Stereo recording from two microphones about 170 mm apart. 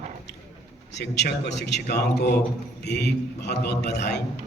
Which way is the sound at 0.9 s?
90° left.